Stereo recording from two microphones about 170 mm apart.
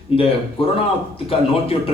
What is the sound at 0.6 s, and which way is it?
Speech, 30° left (ahead or behind).